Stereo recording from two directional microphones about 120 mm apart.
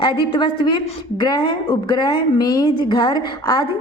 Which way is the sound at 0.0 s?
40° left (ahead or behind).